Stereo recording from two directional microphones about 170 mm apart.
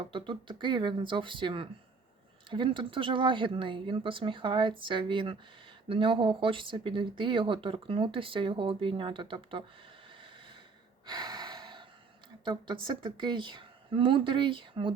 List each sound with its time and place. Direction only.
0.0 s speech: 30° right (ahead or behind)
11.0 s gasp: 25° right (ahead or behind)
12.5 s speech: 25° right (ahead or behind)